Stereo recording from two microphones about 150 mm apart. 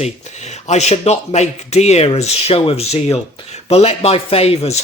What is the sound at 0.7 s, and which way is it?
A man's voice, 45° left (ahead or behind).